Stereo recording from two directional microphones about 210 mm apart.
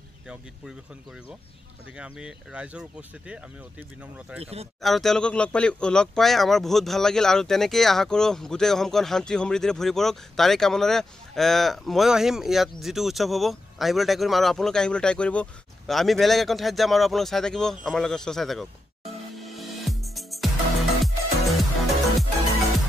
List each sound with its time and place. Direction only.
2.0 s speech: 5° right (ahead or behind)
4.4 s speech: 30° right (ahead or behind)
4.8 s speech: centre (ahead or behind)
19.3 s music: centre (ahead or behind)